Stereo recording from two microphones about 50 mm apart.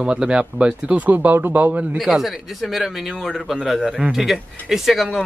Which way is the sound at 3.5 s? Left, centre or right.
Centre.